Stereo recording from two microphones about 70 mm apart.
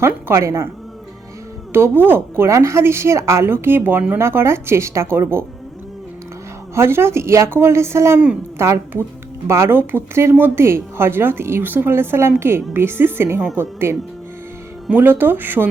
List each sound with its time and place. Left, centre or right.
0.0 s speech: right
1.7 s speech: right
6.7 s a woman's voice: right
14.9 s speech: right